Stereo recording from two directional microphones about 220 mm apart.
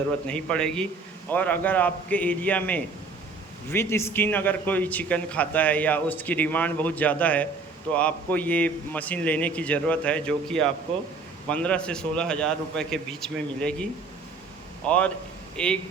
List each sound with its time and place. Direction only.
0.3 s a man's voice: 5° left (ahead or behind)
14.8 s a man's voice: 5° left (ahead or behind)